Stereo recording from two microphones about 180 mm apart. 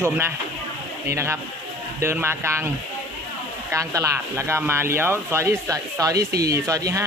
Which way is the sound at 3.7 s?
15° right (ahead or behind).